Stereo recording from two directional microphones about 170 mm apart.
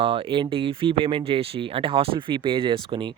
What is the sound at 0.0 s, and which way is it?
Speech, 30° right (ahead or behind).